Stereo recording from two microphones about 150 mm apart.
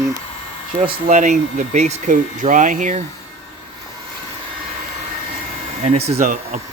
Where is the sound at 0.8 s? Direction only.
50° right (ahead or behind).